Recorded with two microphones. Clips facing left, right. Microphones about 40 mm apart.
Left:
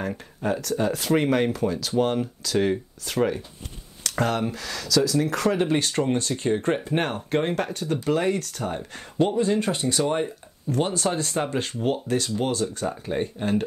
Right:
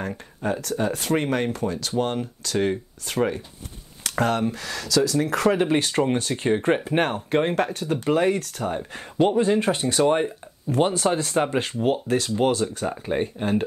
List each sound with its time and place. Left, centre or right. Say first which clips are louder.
0.0 s speech: even; centre
9.2 s speech: right 2 dB; right